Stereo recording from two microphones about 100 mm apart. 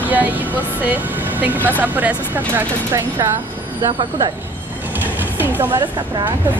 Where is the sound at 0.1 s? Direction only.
15° right (ahead or behind).